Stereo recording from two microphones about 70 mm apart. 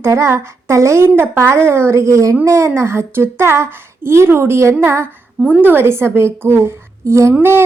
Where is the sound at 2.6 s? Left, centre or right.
Right.